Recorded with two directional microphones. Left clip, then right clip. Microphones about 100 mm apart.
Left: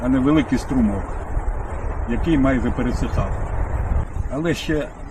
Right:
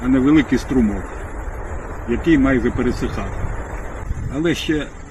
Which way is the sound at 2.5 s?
15° left (ahead or behind).